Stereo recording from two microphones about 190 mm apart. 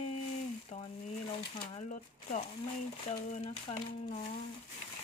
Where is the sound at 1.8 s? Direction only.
40° left (ahead or behind).